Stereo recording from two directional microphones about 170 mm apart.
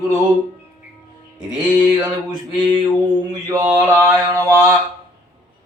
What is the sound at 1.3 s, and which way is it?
Mantra, 25° right (ahead or behind).